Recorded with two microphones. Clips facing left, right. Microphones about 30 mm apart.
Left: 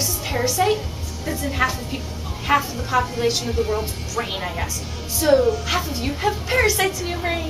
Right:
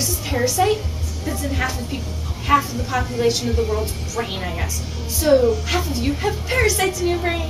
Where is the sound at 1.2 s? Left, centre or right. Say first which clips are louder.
Left 2 dB; centre.